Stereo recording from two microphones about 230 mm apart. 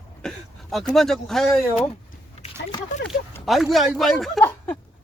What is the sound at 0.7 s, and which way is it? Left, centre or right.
Speech, centre.